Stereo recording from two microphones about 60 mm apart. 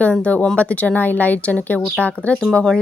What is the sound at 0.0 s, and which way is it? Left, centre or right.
Speech, left.